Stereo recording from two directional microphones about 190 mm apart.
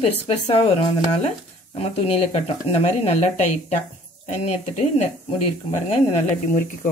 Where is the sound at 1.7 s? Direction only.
30° left (ahead or behind).